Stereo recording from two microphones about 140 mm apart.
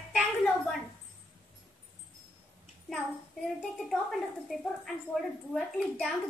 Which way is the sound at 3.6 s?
Centre (ahead or behind).